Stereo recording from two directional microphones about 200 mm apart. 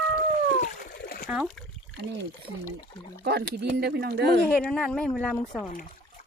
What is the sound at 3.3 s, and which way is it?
Speech, 55° right (ahead or behind).